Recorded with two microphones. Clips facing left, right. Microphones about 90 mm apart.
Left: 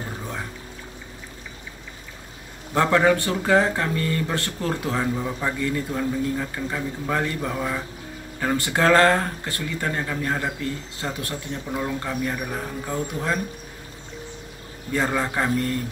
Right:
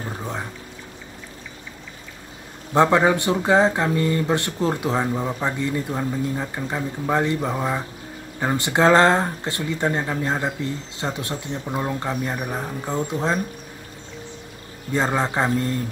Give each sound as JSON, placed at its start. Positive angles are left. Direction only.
{"t": 2.7, "sound": "speech", "side_deg": -20}
{"t": 14.9, "sound": "speech", "side_deg": -20}